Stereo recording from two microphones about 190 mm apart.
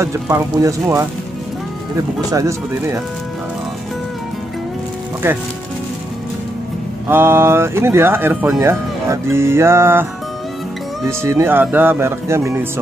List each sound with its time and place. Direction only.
0.0 s speech: 15° right (ahead or behind)
7.1 s speech: 10° right (ahead or behind)
11.1 s speech: 15° right (ahead or behind)